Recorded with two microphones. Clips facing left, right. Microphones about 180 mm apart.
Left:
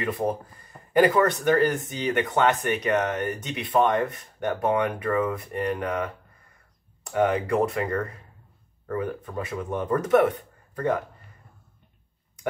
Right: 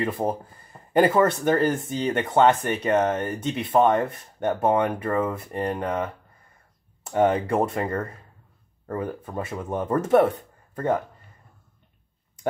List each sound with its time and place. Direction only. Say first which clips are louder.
0.9 s speech: right 1 dB; 25° right (ahead or behind)